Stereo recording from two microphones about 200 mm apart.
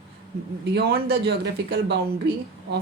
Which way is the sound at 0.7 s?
50° right (ahead or behind).